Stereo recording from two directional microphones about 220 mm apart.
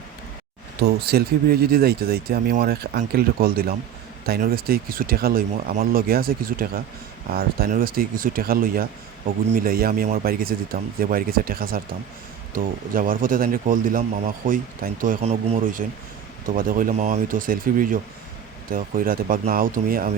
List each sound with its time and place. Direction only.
0.8 s a man's voice: 45° right (ahead or behind)